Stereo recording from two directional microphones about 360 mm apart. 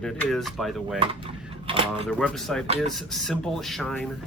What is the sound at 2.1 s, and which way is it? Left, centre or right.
Speech, centre.